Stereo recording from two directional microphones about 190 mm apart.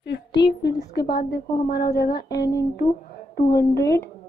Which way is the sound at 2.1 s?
20° left (ahead or behind).